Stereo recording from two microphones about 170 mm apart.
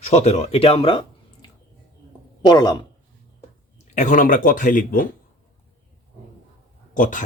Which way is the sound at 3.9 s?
50° left (ahead or behind).